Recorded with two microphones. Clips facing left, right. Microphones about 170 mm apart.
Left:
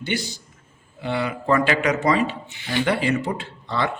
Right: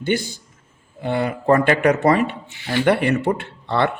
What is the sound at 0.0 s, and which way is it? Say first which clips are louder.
A man's voice: right 5 dB; 50° right (ahead or behind).